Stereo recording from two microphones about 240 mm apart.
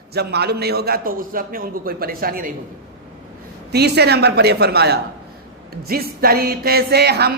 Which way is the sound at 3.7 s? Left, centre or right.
Right.